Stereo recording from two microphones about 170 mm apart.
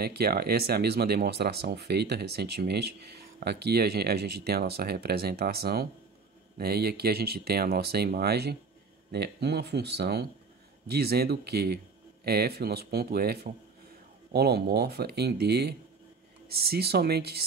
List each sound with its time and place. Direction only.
0.0 s speech: 65° right (ahead or behind)